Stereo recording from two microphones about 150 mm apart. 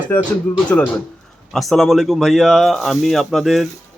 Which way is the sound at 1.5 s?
Centre (ahead or behind).